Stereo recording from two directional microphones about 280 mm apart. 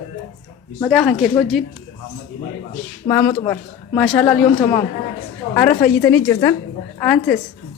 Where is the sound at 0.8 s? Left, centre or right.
Centre.